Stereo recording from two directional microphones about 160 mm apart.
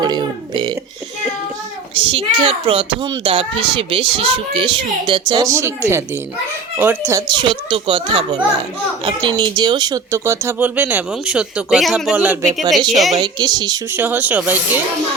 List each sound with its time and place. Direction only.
0.0 s speech: 25° right (ahead or behind)
2.0 s a child's voice: 30° right (ahead or behind); by 12.5 s 10° right (ahead or behind)
13.1 s speech: 25° right (ahead or behind)
13.9 s speech: 10° right (ahead or behind)